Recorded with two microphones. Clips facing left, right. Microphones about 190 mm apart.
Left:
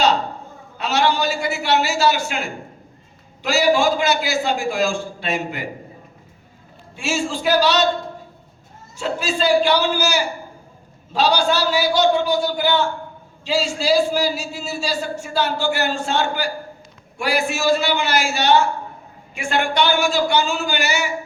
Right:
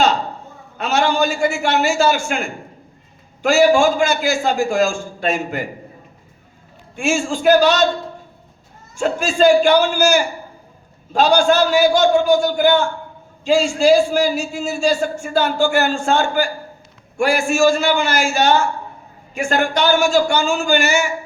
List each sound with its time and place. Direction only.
0.8 s a man's voice: 50° right (ahead or behind)
6.9 s a man's voice: 50° right (ahead or behind)
9.0 s a man's voice: 50° right (ahead or behind)